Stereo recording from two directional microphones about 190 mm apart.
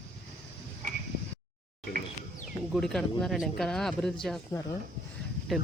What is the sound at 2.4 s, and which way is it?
Speech, centre (ahead or behind).